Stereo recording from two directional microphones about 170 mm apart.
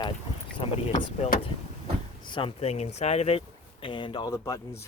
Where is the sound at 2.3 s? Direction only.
35° left (ahead or behind).